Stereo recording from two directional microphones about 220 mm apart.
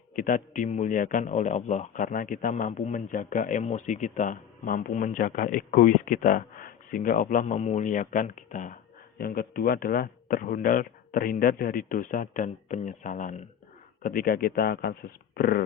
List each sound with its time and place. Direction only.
0.2 s speech: 35° left (ahead or behind)